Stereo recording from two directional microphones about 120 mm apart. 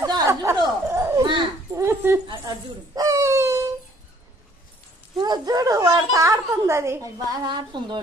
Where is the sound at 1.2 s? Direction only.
40° right (ahead or behind).